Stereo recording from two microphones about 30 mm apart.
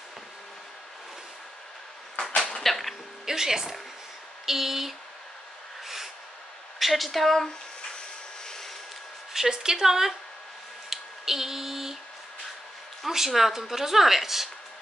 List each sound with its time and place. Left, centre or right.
2.1 s arrow: centre
2.6 s cough: centre
3.3 s speech: centre
6.8 s a sound: centre
7.1 s speech: centre
8.5 s vehicle: centre
9.3 s speech: centre
10.9 s a sound: centre
13.1 s speech: centre